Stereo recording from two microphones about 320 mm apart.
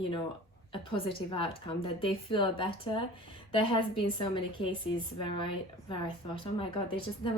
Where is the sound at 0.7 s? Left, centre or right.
Centre.